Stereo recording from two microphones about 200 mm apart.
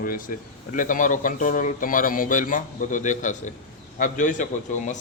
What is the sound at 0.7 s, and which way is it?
A man's voice, 40° left (ahead or behind).